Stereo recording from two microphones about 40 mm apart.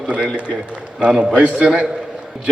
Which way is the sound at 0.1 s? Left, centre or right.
Right.